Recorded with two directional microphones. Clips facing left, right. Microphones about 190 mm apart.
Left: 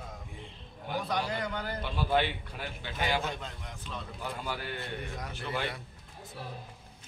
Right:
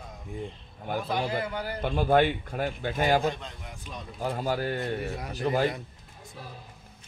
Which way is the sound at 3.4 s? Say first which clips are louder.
Right 1 dB; centre (ahead or behind).